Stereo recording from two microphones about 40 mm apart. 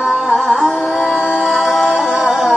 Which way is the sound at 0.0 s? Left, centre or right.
Centre.